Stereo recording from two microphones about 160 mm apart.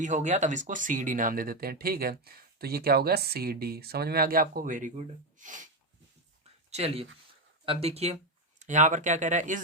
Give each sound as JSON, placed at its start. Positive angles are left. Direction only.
{"t": 0.0, "sound": "speech", "side_deg": -50}
{"t": 6.7, "sound": "speech", "side_deg": -40}